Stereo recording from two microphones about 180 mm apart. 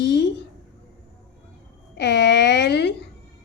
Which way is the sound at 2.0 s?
70° left (ahead or behind).